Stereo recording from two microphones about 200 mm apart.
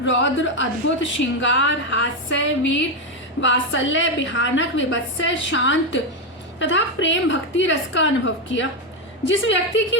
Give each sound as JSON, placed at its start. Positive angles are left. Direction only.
{"t": 0.0, "sound": "a woman's voice", "side_deg": 65}